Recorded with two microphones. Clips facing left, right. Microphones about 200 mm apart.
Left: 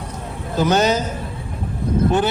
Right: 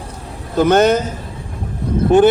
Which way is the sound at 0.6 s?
55° right (ahead or behind).